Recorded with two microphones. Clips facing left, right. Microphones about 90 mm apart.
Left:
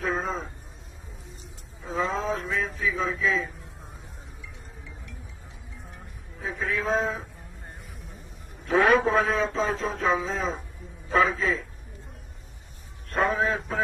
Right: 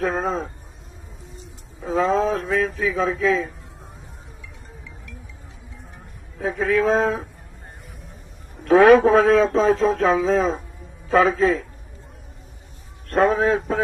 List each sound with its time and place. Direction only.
0.0 s a man's voice: 70° right (ahead or behind)
1.9 s a man's voice: 90° right
6.4 s a man's voice: 90° right
8.6 s a man's voice: 90° right
11.1 s a man's voice: 75° right (ahead or behind)
13.1 s a man's voice: 50° right (ahead or behind)